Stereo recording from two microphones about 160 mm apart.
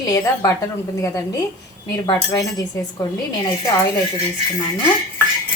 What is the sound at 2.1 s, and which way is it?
Speech, 20° left (ahead or behind).